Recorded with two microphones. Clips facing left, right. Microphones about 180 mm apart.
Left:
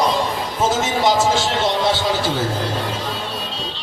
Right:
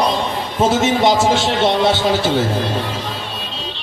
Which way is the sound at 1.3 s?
65° right (ahead or behind).